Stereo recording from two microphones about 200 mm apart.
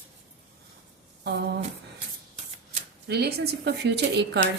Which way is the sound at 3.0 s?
55° right (ahead or behind).